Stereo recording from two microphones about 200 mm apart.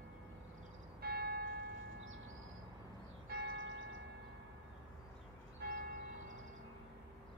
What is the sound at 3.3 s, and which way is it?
Church bell, 60° right (ahead or behind).